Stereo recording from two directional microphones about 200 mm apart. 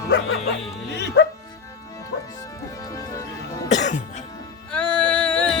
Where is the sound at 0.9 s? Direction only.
60° left (ahead or behind).